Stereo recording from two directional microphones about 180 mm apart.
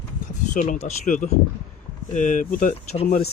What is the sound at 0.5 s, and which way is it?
Speech, 45° left (ahead or behind).